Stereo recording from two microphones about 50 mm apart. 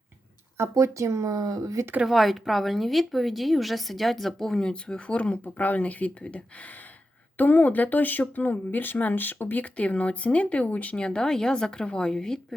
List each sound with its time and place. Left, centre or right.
0.5 s speech: right
2.0 s a woman's voice: centre
4.7 s speech: left
10.9 s speech: centre